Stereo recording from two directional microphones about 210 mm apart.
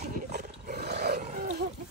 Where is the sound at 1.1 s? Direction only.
35° right (ahead or behind).